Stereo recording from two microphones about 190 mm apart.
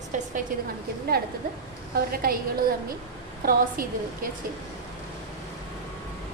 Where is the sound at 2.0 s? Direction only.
50° right (ahead or behind).